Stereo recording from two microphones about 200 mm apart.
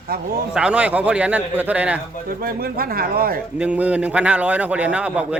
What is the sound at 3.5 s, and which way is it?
A man's voice, 5° right (ahead or behind).